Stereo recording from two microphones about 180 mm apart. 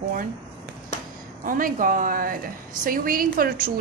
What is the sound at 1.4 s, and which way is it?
A woman's voice, 50° right (ahead or behind).